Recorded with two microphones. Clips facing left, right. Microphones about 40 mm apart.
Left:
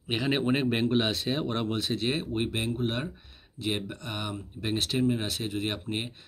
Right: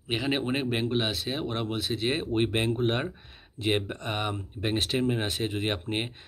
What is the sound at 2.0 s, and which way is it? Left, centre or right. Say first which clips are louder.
Speech: right 1 dB; centre.